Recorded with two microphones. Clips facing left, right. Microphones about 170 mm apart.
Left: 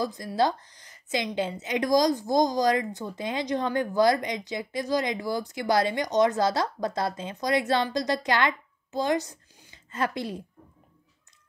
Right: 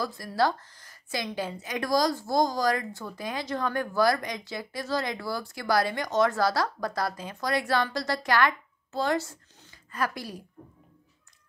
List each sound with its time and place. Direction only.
0.0 s a woman's voice: 20° left (ahead or behind)